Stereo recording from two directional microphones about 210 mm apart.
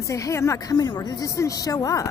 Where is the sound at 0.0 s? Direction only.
15° left (ahead or behind).